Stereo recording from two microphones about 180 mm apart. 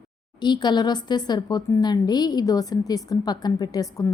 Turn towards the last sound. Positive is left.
turn(degrees=20)  # may be behind; listen again after turning